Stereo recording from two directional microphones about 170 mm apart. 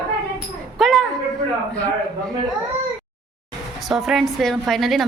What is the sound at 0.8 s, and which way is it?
Speech, centre (ahead or behind).